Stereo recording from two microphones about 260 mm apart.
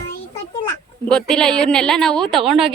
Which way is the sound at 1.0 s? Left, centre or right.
Centre.